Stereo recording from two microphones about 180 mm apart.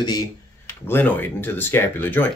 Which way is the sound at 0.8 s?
10° left (ahead or behind).